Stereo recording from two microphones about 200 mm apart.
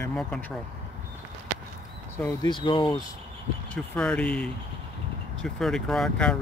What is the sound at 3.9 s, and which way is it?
Speech, 5° left (ahead or behind).